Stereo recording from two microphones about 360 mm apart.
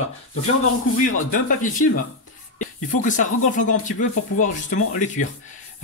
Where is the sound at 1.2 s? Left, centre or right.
Left.